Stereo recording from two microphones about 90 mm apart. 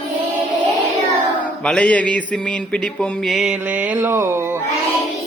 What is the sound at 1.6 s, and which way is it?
Mantra, 15° left (ahead or behind).